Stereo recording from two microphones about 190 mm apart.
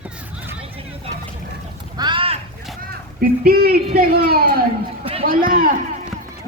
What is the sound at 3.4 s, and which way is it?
A man's voice, 55° right (ahead or behind).